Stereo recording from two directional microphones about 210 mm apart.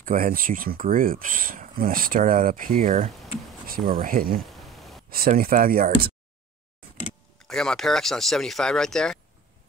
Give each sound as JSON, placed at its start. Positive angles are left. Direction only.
{"t": 0.0, "sound": "speech", "side_deg": -40}
{"t": 4.6, "sound": "a sound", "side_deg": 0}
{"t": 5.4, "sound": "speech", "side_deg": -45}
{"t": 7.4, "sound": "speech", "side_deg": 0}